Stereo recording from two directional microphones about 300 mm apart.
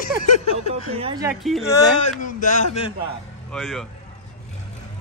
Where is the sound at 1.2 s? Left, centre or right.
Centre.